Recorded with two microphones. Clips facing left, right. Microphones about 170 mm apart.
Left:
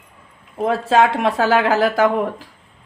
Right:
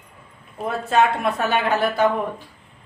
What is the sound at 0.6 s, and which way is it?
Speech, 90° left.